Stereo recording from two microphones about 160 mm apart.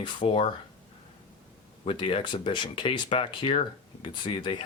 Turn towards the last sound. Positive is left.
turn(degrees=30)  # may be behind; listen again after turning